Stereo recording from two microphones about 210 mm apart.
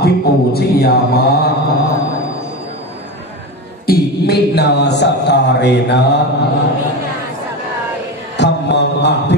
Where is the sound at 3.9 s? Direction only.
50° left (ahead or behind).